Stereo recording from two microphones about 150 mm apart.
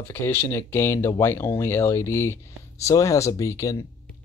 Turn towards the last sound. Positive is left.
turn(degrees=20)  # may be behind; listen again after turning